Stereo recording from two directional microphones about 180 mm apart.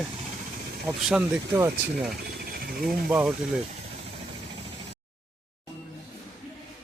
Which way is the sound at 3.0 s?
5° right (ahead or behind).